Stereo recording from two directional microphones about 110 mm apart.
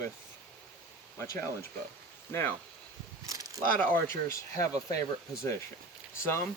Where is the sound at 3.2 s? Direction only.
30° right (ahead or behind).